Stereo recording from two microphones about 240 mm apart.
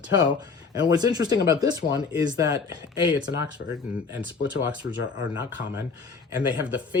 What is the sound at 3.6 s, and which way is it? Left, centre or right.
Speech, left.